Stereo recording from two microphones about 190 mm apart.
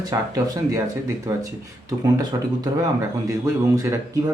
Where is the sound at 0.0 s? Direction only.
15° right (ahead or behind).